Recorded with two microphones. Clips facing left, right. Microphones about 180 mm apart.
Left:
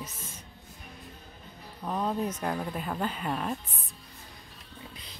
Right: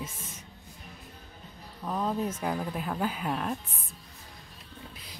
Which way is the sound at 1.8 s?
Centre (ahead or behind).